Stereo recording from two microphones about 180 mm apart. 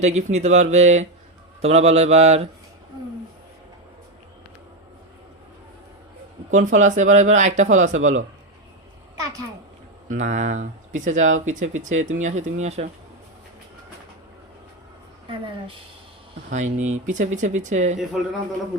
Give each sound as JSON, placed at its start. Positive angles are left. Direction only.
{"t": 0.0, "sound": "speech", "side_deg": -40}
{"t": 6.5, "sound": "speech", "side_deg": -45}
{"t": 10.1, "sound": "speech", "side_deg": -40}
{"t": 16.5, "sound": "speech", "side_deg": -40}